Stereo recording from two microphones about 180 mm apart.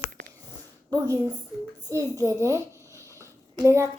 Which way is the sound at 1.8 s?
20° right (ahead or behind).